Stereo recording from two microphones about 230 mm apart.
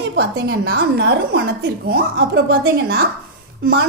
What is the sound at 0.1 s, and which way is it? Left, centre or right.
A woman's voice, right.